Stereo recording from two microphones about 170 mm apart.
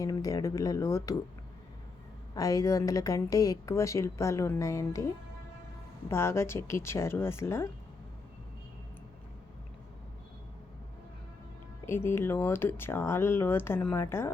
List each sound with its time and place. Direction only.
0.0 s a woman's voice: 20° left (ahead or behind)
2.3 s a woman's voice: 20° left (ahead or behind)
6.1 s speech: 15° left (ahead or behind)
11.9 s speech: 15° left (ahead or behind)